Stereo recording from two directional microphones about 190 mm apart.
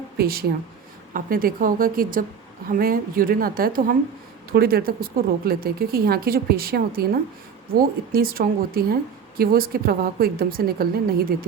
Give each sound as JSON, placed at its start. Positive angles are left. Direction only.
{"t": 0.2, "sound": "speech", "side_deg": -55}